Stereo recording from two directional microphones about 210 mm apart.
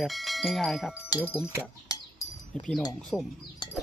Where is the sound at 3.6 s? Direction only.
20° left (ahead or behind).